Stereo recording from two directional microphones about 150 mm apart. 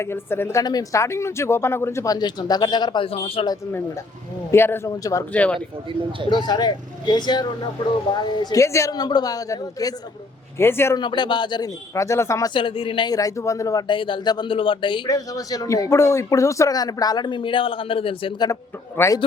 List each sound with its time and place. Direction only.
0.0 s speech: 15° left (ahead or behind); by 3.4 s 40° left (ahead or behind)
4.5 s a man's voice: 15° left (ahead or behind)
5.3 s a man's voice: 10° left (ahead or behind)
6.3 s a man's voice: 30° left (ahead or behind)
11.0 s speech: 30° left (ahead or behind)
12.5 s speech: 35° left (ahead or behind)
18.9 s speech: 20° left (ahead or behind)